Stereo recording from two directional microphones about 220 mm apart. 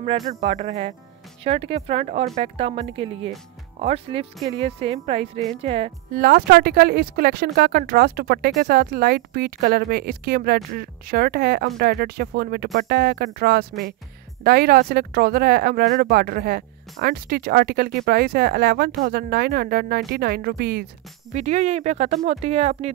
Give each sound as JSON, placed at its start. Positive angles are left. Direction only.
{"t": 0.3, "sound": "speech", "side_deg": -30}
{"t": 21.3, "sound": "speech", "side_deg": -30}